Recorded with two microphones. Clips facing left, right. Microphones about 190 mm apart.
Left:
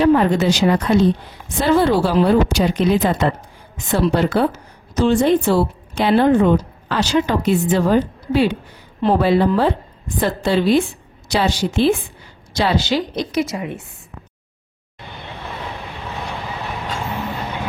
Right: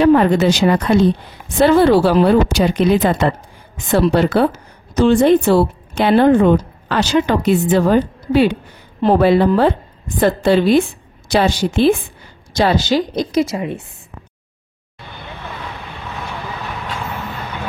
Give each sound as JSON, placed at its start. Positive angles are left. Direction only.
{"t": 0.0, "sound": "a woman's voice", "side_deg": -65}
{"t": 12.5, "sound": "speech", "side_deg": -45}